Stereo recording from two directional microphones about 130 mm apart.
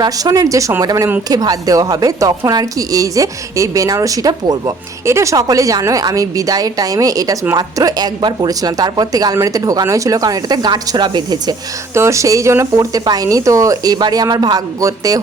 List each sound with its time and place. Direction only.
0.0 s speech: 30° right (ahead or behind)
11.9 s speech: 20° right (ahead or behind)